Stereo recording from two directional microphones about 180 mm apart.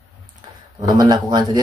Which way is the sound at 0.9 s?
20° right (ahead or behind).